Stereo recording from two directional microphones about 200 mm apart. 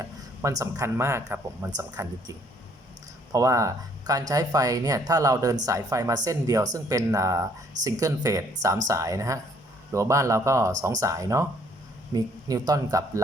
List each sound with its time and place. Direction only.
0.0 s speech: 15° right (ahead or behind)
3.3 s speech: 15° right (ahead or behind)